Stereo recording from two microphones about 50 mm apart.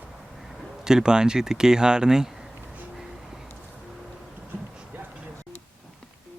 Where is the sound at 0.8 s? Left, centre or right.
Centre.